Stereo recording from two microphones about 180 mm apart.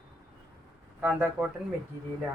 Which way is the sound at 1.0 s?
10° right (ahead or behind).